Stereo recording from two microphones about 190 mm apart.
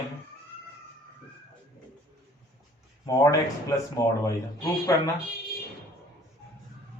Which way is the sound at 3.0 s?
20° left (ahead or behind).